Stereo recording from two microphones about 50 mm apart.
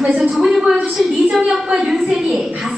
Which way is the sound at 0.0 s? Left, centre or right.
Centre.